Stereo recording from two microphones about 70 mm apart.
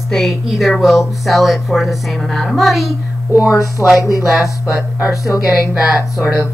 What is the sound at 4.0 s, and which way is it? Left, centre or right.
Speech, left.